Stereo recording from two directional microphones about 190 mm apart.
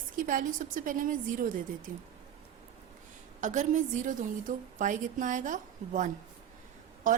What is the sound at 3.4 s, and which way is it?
A woman's voice, 40° right (ahead or behind).